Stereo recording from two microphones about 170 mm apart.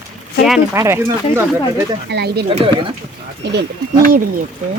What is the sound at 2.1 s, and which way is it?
Speech, 75° right (ahead or behind).